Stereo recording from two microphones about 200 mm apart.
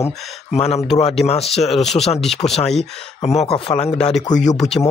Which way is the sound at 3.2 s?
30° left (ahead or behind).